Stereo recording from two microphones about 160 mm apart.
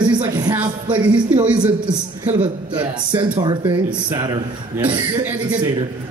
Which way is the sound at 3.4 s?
25° right (ahead or behind).